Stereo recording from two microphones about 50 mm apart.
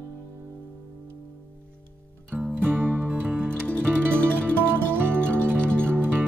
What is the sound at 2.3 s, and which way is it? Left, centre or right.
Music, right.